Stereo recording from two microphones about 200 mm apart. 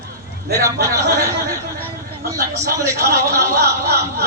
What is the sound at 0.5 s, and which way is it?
Speech, 15° right (ahead or behind).